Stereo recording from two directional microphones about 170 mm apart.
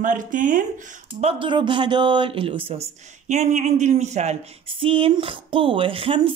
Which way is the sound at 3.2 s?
45° right (ahead or behind).